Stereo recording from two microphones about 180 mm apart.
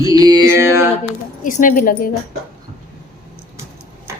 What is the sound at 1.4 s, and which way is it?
Speech, 45° left (ahead or behind).